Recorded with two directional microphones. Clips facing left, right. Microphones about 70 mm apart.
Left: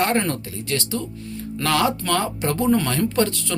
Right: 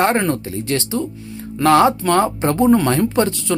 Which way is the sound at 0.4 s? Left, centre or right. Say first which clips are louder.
Right 5 dB; right.